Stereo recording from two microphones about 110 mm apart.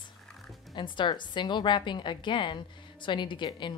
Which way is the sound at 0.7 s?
45° left (ahead or behind).